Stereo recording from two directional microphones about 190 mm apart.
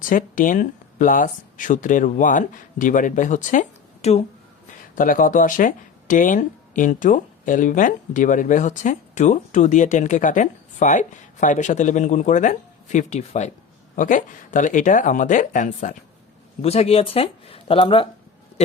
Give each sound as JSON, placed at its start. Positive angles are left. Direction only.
{"t": 0.0, "sound": "speech", "side_deg": 45}